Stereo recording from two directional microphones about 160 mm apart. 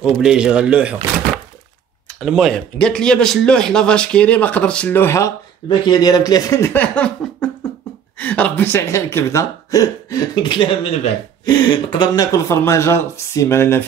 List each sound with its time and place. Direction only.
0.0 s speech: 5° right (ahead or behind)
2.1 s speech: centre (ahead or behind)